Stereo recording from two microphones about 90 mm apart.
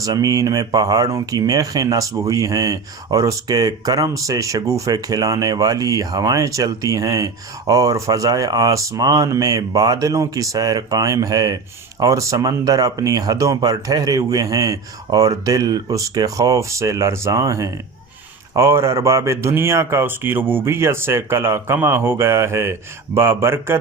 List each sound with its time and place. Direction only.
0.0 s speech: 40° right (ahead or behind)